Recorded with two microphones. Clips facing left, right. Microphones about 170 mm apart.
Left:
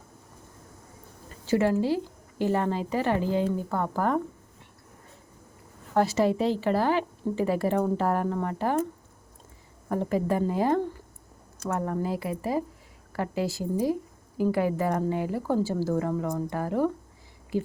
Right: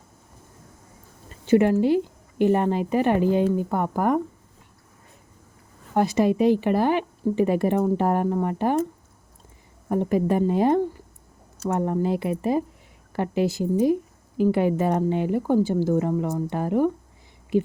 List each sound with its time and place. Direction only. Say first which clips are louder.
1.5 s a woman's voice: right 5 dB; 20° right (ahead or behind)
5.9 s speech: right 3 dB; 15° right (ahead or behind)
9.9 s speech: right 4 dB; 20° right (ahead or behind)